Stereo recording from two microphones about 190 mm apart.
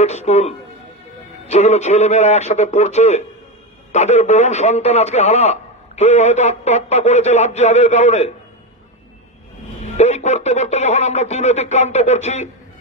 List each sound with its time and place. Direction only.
0.0 s speech: 35° left (ahead or behind)
9.8 s speech: 35° left (ahead or behind)